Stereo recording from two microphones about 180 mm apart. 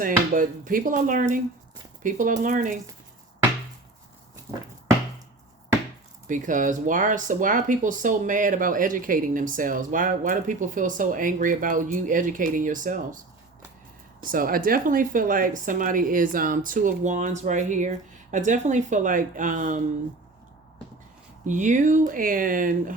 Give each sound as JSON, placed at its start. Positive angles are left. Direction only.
{"t": 0.0, "sound": "speech", "side_deg": -50}
{"t": 6.2, "sound": "speech", "side_deg": -45}
{"t": 14.3, "sound": "speech", "side_deg": -50}
{"t": 21.4, "sound": "speech", "side_deg": -45}